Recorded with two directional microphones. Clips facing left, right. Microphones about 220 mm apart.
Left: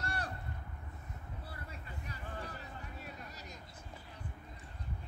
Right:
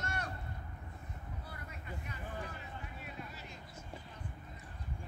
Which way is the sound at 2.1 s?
40° left (ahead or behind).